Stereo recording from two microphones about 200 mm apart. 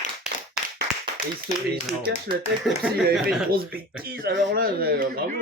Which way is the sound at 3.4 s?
50° right (ahead or behind).